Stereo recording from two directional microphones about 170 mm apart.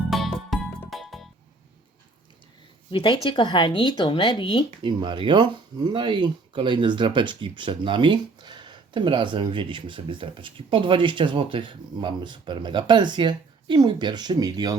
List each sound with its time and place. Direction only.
0.1 s music: centre (ahead or behind)
2.9 s speech: 30° left (ahead or behind)
4.8 s speech: 30° right (ahead or behind)